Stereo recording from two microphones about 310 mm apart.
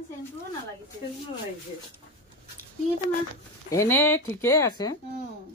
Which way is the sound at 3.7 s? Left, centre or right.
Centre.